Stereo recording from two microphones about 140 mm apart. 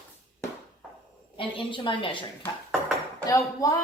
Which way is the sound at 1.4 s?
35° left (ahead or behind).